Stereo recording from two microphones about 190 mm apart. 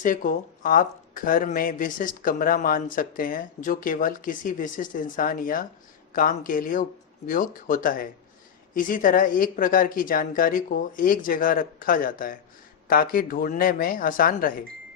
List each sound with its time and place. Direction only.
0.0 s speech: 45° left (ahead or behind)